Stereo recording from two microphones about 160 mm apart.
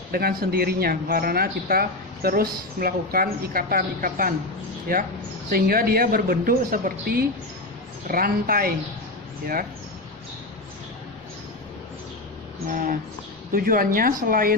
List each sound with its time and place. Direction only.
0.1 s speech: 75° right (ahead or behind)
5.5 s a woman's voice: 65° right (ahead or behind)
12.7 s a woman's voice: 60° right (ahead or behind)